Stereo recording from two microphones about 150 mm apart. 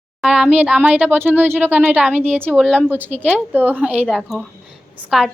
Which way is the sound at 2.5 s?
5° left (ahead or behind).